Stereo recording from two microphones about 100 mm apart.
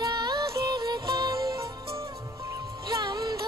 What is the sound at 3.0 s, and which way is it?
Music, 45° right (ahead or behind).